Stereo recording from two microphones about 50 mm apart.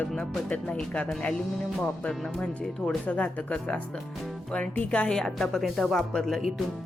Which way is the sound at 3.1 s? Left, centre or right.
Left.